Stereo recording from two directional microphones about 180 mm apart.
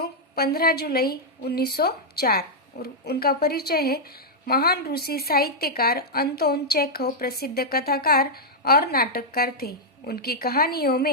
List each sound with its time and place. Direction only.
0.0 s a woman's voice: 60° left (ahead or behind)